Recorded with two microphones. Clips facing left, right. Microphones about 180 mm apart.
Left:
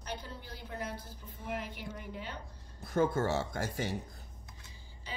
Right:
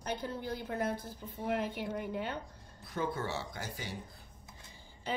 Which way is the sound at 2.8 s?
45° left (ahead or behind).